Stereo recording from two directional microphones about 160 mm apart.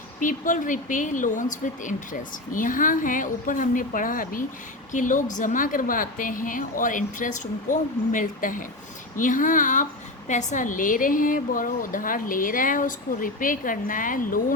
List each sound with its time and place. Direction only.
0.2 s a woman's voice: 55° left (ahead or behind)